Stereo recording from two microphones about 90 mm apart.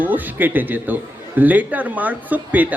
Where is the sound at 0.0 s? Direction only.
20° right (ahead or behind).